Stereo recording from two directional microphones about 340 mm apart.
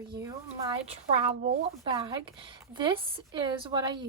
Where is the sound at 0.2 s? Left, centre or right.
Centre.